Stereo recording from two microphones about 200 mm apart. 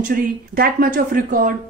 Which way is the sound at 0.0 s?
45° right (ahead or behind).